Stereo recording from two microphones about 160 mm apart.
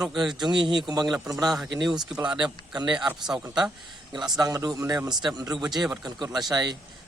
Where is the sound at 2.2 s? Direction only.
30° right (ahead or behind).